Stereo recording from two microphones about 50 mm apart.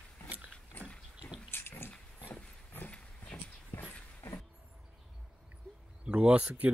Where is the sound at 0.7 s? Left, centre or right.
Left.